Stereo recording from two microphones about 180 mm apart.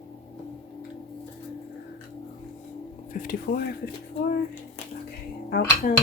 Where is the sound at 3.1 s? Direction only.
55° left (ahead or behind).